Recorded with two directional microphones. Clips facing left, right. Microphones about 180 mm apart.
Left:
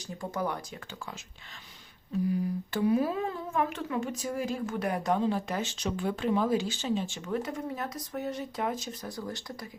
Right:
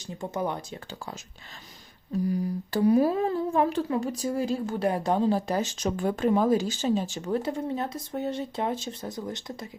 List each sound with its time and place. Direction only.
0.2 s speech: 20° right (ahead or behind)
2.3 s speech: 40° right (ahead or behind); by 9.6 s 20° right (ahead or behind)